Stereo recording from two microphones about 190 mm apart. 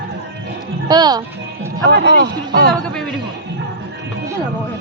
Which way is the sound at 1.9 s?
60° right (ahead or behind).